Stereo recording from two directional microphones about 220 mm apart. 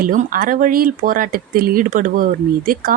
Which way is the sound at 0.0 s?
40° right (ahead or behind).